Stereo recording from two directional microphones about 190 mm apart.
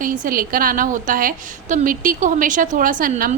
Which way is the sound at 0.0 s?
45° right (ahead or behind).